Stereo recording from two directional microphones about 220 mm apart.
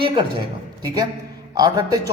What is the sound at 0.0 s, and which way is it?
A woman's voice, 20° right (ahead or behind).